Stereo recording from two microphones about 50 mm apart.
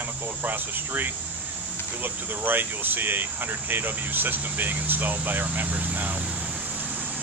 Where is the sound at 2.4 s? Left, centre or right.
Right.